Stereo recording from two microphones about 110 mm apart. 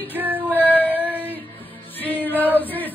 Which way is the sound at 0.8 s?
15° right (ahead or behind).